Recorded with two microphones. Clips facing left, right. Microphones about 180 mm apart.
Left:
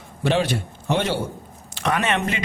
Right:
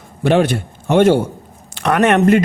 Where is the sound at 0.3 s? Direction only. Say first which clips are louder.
Right 7 dB; 55° right (ahead or behind).